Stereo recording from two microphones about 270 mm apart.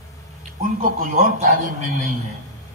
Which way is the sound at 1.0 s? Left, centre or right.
Right.